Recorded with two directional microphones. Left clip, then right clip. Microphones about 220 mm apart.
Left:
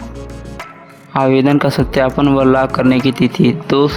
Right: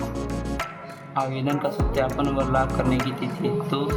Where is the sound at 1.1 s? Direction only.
45° left (ahead or behind).